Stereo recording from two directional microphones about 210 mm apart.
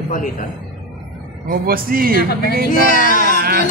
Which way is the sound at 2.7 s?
40° left (ahead or behind).